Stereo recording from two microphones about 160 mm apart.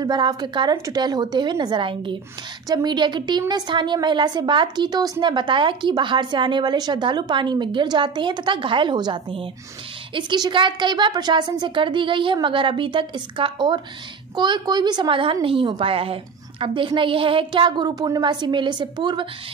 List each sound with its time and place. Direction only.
0.0 s a woman's voice: 25° right (ahead or behind)